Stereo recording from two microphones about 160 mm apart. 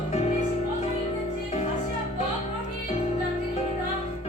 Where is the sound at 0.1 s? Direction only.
45° left (ahead or behind).